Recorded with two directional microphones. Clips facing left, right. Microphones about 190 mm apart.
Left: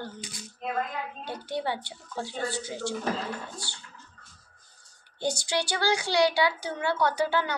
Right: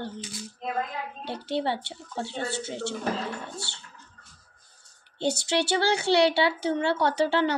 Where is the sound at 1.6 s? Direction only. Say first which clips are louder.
Right 3 dB; 25° right (ahead or behind).